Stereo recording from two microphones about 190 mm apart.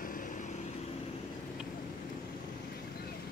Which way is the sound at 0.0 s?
45° left (ahead or behind).